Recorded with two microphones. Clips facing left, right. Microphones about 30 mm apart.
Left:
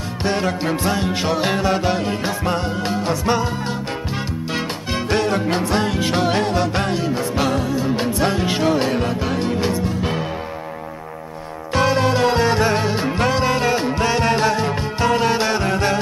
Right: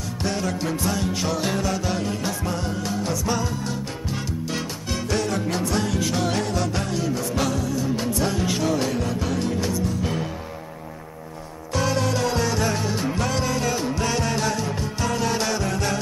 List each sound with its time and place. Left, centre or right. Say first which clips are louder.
0.2 s music: left 5 dB; left
2.4 s music: left 6 dB; left
4.9 s music: left 5 dB; left
11.7 s music: left 6 dB; left